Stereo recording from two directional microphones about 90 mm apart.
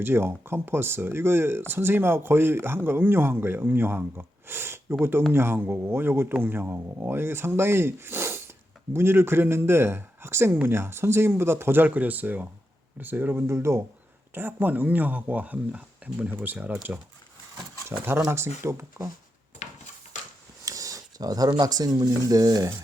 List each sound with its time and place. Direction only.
0.0 s speech: 25° right (ahead or behind)
20.7 s a sound: 40° right (ahead or behind)
21.6 s speech: 45° right (ahead or behind)